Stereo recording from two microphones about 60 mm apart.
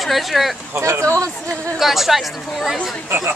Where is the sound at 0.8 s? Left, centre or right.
Right.